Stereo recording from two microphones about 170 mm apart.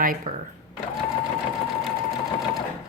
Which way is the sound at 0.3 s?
45° right (ahead or behind).